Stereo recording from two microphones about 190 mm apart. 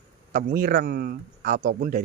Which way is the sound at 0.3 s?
50° right (ahead or behind).